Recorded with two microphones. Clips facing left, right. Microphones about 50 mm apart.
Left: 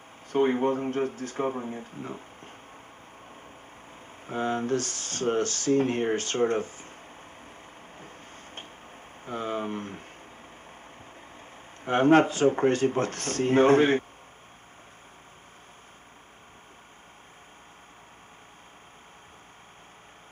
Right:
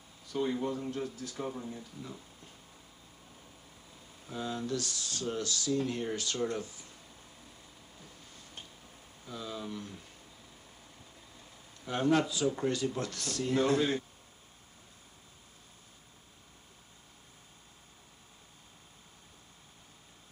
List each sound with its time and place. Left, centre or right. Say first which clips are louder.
0.3 s speech: left 9 dB; left
4.3 s speech: left 8 dB; left
8.0 s a sound: left 7 dB; left
11.3 s speech: left 8 dB; left